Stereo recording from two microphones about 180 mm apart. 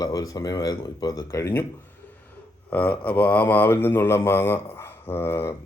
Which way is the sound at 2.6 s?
10° left (ahead or behind).